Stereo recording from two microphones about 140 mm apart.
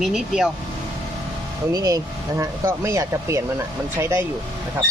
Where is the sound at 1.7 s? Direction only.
25° right (ahead or behind).